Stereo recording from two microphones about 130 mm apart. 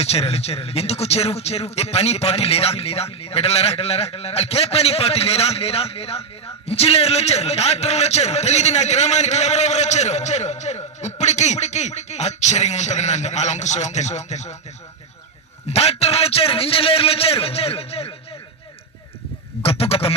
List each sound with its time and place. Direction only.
0.0 s a man's voice: 55° left (ahead or behind)
15.7 s a man's voice: 50° left (ahead or behind)
19.6 s a man's voice: 50° left (ahead or behind)